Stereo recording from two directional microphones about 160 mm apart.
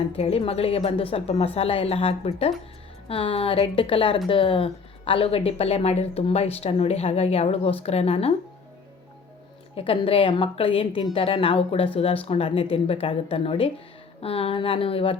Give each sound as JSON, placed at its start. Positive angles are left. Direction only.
{"t": 0.1, "sound": "a woman's voice", "side_deg": 40}
{"t": 9.7, "sound": "speech", "side_deg": 35}